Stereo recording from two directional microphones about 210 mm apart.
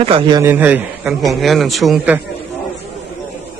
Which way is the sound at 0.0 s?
25° right (ahead or behind).